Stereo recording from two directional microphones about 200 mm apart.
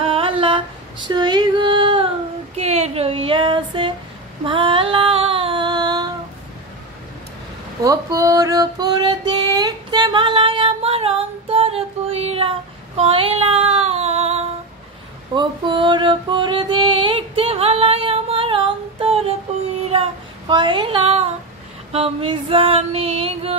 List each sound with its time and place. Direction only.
0.0 s female singing: 25° right (ahead or behind)
2.5 s a sound: 35° right (ahead or behind)
4.5 s female singing: 25° right (ahead or behind)
7.8 s female singing: 15° right (ahead or behind)
15.3 s mantra: 25° right (ahead or behind)
19.9 s child singing: 25° right (ahead or behind)
21.9 s female singing: 30° right (ahead or behind)